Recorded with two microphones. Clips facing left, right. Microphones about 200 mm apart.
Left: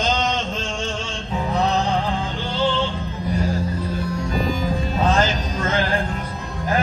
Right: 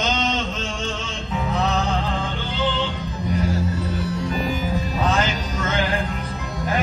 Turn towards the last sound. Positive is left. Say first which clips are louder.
# left 2 dB
turn(degrees=30)  # may be behind; listen again after turning